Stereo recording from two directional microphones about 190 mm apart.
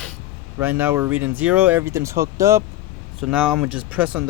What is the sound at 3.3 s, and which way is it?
Speech, 5° right (ahead or behind).